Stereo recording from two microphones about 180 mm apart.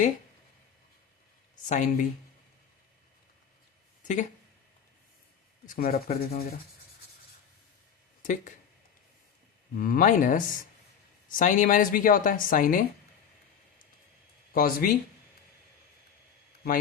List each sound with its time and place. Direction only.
1.6 s speech: 45° left (ahead or behind)
4.0 s speech: 40° left (ahead or behind)
5.6 s a woman's voice: 50° left (ahead or behind)
8.2 s speech: 45° left (ahead or behind)
9.7 s a woman's voice: 50° left (ahead or behind)
14.5 s a woman's voice: 50° left (ahead or behind)